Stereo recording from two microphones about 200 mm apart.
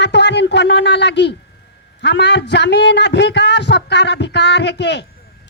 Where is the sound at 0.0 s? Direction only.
60° left (ahead or behind).